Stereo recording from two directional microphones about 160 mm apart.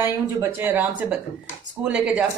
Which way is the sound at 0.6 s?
10° right (ahead or behind).